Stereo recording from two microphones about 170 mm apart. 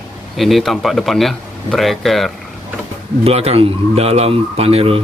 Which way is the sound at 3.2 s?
35° right (ahead or behind).